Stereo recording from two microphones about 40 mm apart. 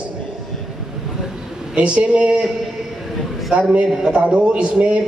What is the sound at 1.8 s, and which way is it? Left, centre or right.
Speech, right.